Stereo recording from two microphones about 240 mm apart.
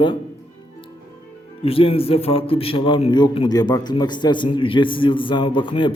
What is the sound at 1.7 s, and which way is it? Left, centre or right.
A man's voice, left.